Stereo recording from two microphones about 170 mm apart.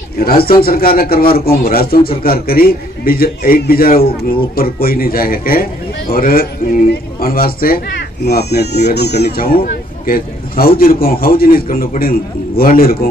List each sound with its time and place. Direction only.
0.2 s a man's voice: 60° left (ahead or behind)
8.3 s a man's voice: 75° left (ahead or behind)